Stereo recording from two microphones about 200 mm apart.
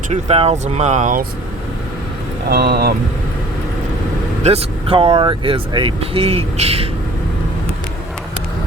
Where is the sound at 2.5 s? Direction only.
50° right (ahead or behind).